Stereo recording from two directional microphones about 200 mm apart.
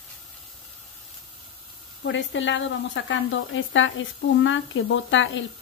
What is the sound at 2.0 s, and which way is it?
Speech, 70° left (ahead or behind).